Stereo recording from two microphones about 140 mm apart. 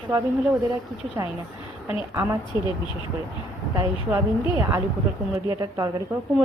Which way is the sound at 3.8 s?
20° right (ahead or behind).